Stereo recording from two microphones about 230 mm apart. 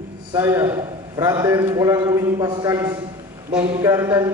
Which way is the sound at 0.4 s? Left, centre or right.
Centre.